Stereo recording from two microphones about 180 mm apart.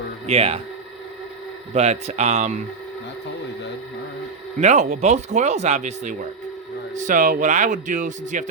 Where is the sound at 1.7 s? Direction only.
35° right (ahead or behind).